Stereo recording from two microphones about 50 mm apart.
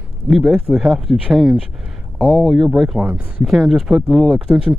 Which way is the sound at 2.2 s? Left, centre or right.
Centre.